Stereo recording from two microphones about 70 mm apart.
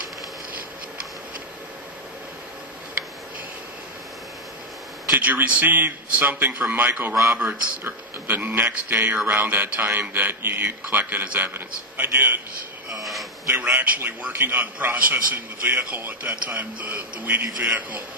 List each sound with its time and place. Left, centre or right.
5.1 s speech: right
12.9 s a sound: centre
13.6 s speech: right